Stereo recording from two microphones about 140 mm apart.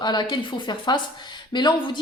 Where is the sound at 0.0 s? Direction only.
30° left (ahead or behind).